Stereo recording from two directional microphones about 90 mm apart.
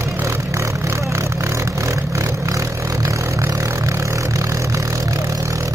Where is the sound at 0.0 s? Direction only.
30° right (ahead or behind).